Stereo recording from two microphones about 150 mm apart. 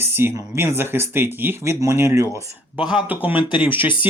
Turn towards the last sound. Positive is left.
turn(degrees=-10)  # may be behind; listen again after turning